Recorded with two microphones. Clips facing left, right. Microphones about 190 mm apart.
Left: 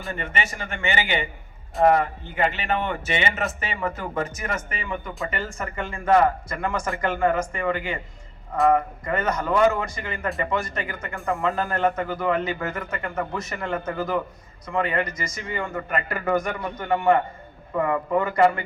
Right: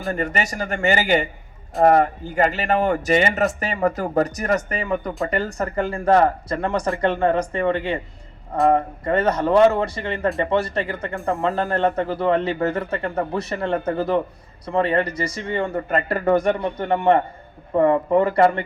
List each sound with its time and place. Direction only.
0.1 s speech: 40° right (ahead or behind)